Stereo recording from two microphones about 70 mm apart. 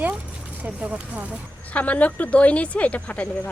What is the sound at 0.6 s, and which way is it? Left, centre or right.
Speech, right.